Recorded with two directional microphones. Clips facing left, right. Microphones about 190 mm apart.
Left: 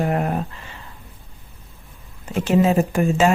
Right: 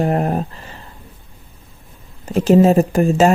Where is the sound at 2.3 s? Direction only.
40° right (ahead or behind).